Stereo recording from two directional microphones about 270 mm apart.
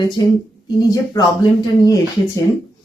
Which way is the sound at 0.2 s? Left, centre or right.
Centre.